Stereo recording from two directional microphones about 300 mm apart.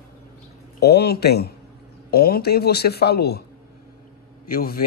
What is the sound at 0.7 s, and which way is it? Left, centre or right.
Speech, left.